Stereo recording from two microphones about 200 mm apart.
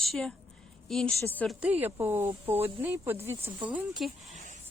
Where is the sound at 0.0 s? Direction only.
Centre (ahead or behind).